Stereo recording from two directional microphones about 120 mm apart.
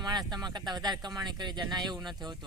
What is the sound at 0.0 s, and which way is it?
A man's voice, 35° right (ahead or behind).